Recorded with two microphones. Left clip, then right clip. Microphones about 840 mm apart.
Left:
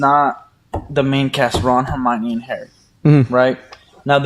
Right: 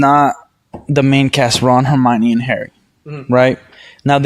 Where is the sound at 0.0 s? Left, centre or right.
Right.